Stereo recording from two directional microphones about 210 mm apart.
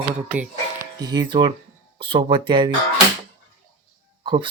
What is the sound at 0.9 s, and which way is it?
Speech, 20° right (ahead or behind).